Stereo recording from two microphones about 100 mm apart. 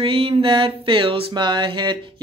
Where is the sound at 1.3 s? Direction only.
50° right (ahead or behind).